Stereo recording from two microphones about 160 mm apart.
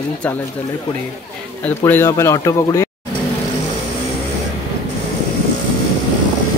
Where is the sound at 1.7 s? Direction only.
15° left (ahead or behind).